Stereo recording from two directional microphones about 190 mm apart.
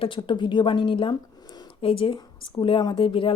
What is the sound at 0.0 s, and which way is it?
Speech, 25° left (ahead or behind).